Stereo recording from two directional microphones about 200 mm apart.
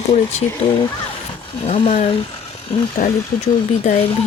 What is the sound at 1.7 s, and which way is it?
Speech, 30° left (ahead or behind).